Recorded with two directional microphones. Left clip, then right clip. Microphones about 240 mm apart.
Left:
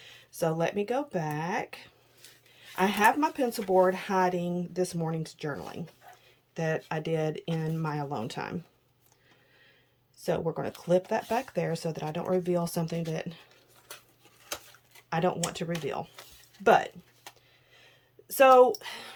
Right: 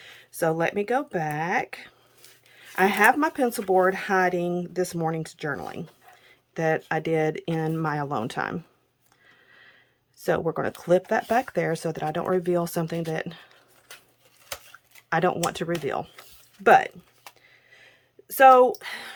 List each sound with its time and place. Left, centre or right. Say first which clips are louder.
0.0 s speech: right 5 dB; centre
10.2 s speech: right 5 dB; centre
15.1 s speech: right 6 dB; centre
17.7 s a sound: right 1 dB; centre
18.8 s speech: right 5 dB; centre